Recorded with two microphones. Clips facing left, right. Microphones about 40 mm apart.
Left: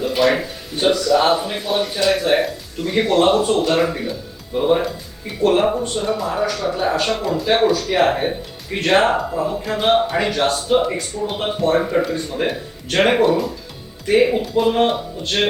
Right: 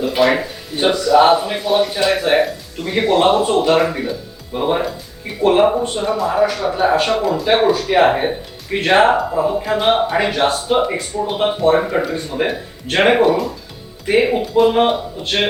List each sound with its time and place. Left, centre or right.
0.0 s speech: centre
2.0 s speech: centre
2.4 s speech: centre
4.5 s speech: centre
6.1 s speech: centre
6.4 s speech: centre
13.2 s speech: centre
14.0 s speech: centre
14.4 s speech: centre
14.7 s speech: centre